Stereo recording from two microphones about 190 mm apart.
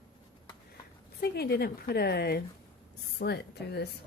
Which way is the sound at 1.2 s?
60° left (ahead or behind).